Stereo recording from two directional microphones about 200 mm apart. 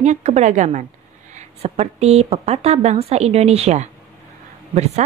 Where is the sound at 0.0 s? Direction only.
35° right (ahead or behind).